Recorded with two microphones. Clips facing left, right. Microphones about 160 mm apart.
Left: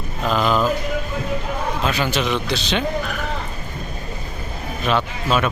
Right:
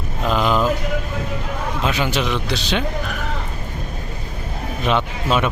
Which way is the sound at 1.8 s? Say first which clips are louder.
Right 1 dB; 20° right (ahead or behind).